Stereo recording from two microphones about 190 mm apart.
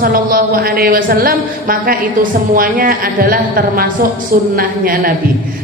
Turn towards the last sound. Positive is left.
turn(degrees=-45)  # may be behind; listen again after turning